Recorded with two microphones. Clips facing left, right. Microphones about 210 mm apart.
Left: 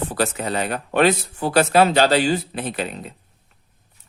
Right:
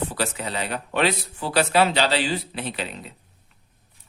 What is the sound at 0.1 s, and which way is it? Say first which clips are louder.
Speech: left 5 dB; 50° left (ahead or behind).